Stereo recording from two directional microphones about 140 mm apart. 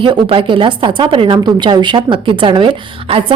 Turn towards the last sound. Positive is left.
turn(degrees=-40)  # may be behind; listen again after turning